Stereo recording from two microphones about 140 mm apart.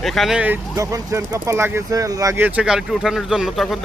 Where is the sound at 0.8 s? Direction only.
25° right (ahead or behind).